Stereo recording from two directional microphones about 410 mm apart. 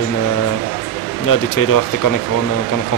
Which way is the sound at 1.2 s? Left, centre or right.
Left.